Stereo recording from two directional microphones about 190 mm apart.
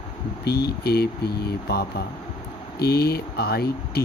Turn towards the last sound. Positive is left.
turn(degrees=55)  # may be behind; listen again after turning